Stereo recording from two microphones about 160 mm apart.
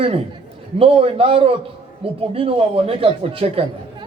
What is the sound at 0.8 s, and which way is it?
A man's voice, 35° right (ahead or behind).